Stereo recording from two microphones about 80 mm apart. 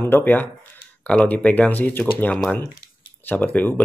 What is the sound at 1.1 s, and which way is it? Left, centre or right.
Speech, centre.